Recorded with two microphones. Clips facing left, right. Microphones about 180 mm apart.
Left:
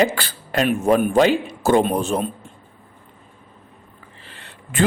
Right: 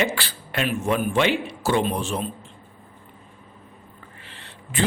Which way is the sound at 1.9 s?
50° left (ahead or behind).